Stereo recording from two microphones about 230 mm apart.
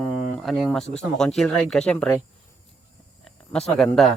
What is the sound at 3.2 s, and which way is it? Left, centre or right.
Speech, centre.